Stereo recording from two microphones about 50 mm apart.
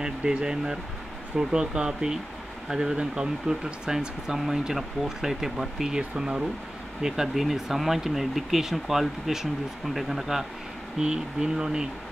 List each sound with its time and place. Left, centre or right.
0.0 s speech: centre